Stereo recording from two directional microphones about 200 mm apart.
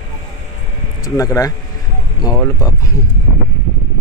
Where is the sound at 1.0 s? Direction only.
15° left (ahead or behind).